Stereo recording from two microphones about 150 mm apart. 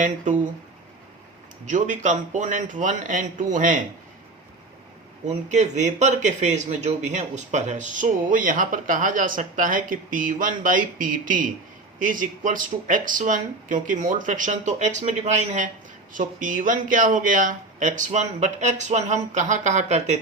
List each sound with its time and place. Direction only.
1.6 s speech: 55° right (ahead or behind)
5.2 s speech: 50° right (ahead or behind)